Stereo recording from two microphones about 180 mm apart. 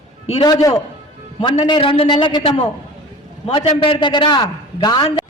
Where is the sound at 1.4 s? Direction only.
25° left (ahead or behind).